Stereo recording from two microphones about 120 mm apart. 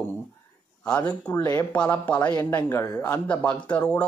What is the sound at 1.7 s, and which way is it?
Speech, 15° left (ahead or behind).